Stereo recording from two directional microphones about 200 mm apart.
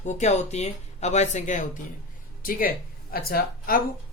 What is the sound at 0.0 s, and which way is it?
A woman's voice, 35° left (ahead or behind).